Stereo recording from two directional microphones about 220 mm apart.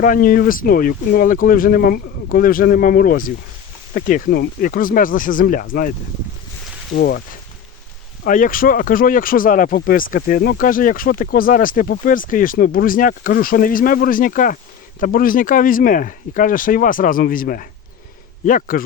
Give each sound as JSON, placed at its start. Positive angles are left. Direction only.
{"t": 0.0, "sound": "speech", "side_deg": 40}
{"t": 6.9, "sound": "speech", "side_deg": 45}
{"t": 8.2, "sound": "speech", "side_deg": 40}